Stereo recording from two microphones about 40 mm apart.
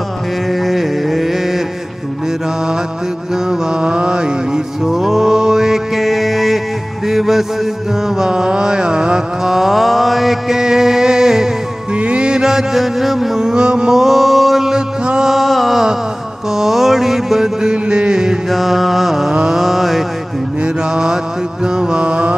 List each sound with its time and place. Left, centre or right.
0.5 s a sound: centre
3.4 s mantra: right
4.8 s music: centre
8.2 s a sound: centre
9.5 s mantra: centre
10.6 s music: centre
11.9 s music: right; by 13.4 s centre
13.4 s mantra: centre
15.0 s music: centre
15.3 s music: centre
16.5 s mantra: centre
17.8 s music: right
18.5 s mantra: centre
20.6 s mantra: centre